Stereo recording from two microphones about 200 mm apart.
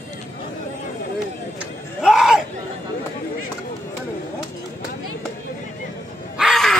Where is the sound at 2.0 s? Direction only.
Centre (ahead or behind).